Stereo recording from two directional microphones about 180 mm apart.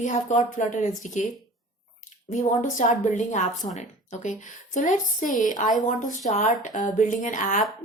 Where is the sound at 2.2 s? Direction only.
45° left (ahead or behind).